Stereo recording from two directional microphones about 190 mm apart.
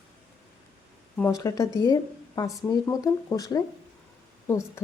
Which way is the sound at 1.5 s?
15° left (ahead or behind).